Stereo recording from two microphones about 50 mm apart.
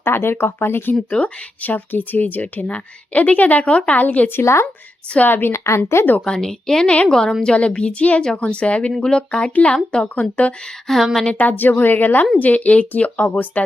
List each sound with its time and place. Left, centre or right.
0.0 s speech: left
1.1 s a woman's voice: left
6.2 s a woman's voice: centre
10.2 s speech: left
10.8 s speech: centre
11.3 s speech: left